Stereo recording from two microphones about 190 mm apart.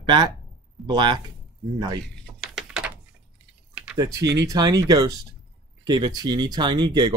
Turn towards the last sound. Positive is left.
turn(degrees=-25)  # may be behind; listen again after turning